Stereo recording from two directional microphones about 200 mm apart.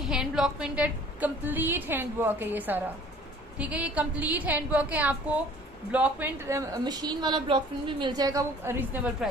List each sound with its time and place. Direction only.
0.1 s a woman's voice: 5° right (ahead or behind)